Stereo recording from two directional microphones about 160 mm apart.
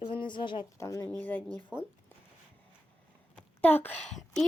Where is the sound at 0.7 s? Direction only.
20° left (ahead or behind).